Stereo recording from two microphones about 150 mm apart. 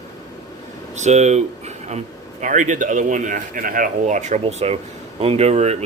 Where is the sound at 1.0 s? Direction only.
50° right (ahead or behind).